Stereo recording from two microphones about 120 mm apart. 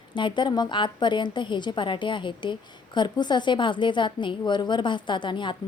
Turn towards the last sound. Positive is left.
turn(degrees=40)  # may be behind; listen again after turning